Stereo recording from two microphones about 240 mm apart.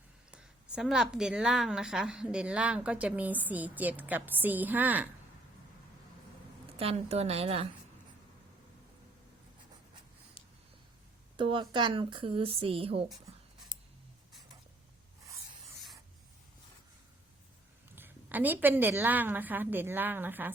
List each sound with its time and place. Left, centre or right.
0.3 s a woman's voice: centre
6.7 s speech: right
11.3 s speech: right
13.1 s a woman's voice: centre
17.9 s a woman's voice: centre